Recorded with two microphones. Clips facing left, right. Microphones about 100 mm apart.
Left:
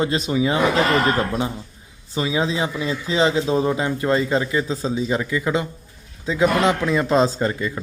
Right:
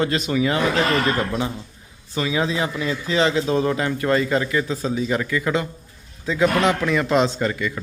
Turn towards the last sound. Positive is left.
turn(degrees=25)  # may be behind; listen again after turning